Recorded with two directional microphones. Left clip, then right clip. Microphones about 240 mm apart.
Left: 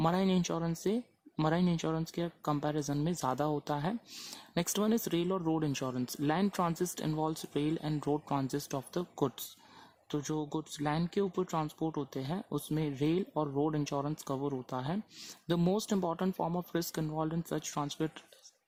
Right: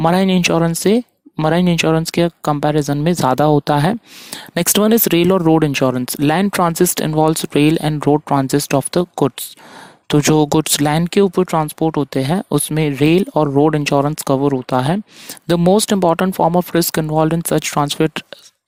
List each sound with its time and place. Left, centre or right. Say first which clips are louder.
0.0 s speech: right 17 dB; right